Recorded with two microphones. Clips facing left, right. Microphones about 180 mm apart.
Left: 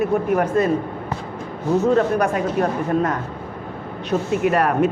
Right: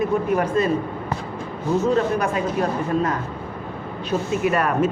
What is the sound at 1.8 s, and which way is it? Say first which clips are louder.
Speech: left 3 dB; 55° left (ahead or behind).